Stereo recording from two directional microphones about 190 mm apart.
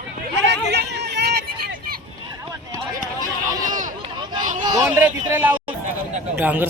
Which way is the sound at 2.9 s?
45° right (ahead or behind).